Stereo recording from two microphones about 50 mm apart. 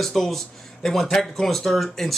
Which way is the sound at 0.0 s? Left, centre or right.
Centre.